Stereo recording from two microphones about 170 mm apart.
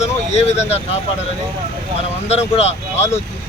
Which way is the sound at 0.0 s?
40° left (ahead or behind).